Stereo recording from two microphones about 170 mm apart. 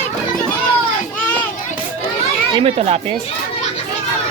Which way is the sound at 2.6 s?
35° right (ahead or behind).